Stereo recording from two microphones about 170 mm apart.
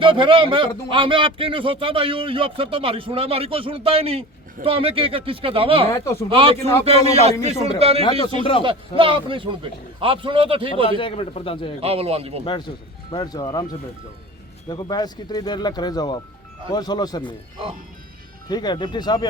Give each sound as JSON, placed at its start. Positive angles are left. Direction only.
{"t": 0.0, "sound": "a man's voice", "side_deg": -30}
{"t": 5.9, "sound": "speech", "side_deg": 20}
{"t": 6.2, "sound": "a man's voice", "side_deg": -30}
{"t": 10.8, "sound": "a man's voice", "side_deg": 30}
{"t": 11.8, "sound": "a man's voice", "side_deg": -35}
{"t": 12.5, "sound": "speech", "side_deg": 25}
{"t": 14.7, "sound": "speech", "side_deg": 25}
{"t": 18.4, "sound": "speech", "side_deg": 25}